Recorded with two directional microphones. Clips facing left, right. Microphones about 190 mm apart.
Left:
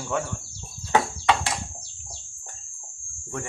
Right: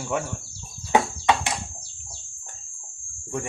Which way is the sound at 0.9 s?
20° right (ahead or behind).